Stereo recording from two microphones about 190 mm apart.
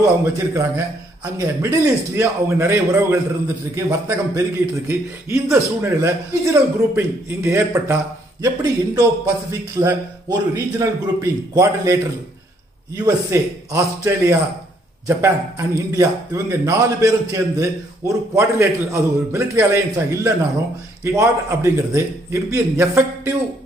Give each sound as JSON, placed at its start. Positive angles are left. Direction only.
{"t": 0.0, "sound": "a man's voice", "side_deg": -15}